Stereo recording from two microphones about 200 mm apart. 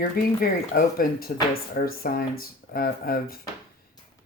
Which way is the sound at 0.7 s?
50° left (ahead or behind).